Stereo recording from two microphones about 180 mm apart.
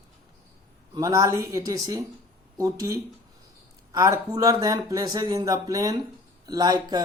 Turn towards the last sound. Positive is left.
turn(degrees=-20)  # may be behind; listen again after turning